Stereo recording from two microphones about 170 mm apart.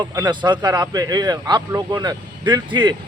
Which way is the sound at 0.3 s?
25° right (ahead or behind).